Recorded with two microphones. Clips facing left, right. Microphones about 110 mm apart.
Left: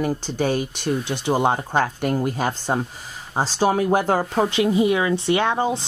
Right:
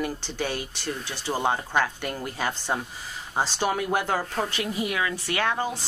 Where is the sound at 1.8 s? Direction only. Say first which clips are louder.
Left 7 dB; 45° left (ahead or behind).